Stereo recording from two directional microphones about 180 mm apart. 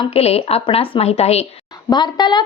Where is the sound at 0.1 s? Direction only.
35° left (ahead or behind).